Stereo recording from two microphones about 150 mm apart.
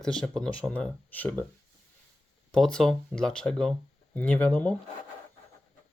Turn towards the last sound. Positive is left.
turn(degrees=10)  # may be behind; listen again after turning